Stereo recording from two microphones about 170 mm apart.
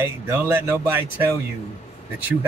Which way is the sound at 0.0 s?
15° right (ahead or behind).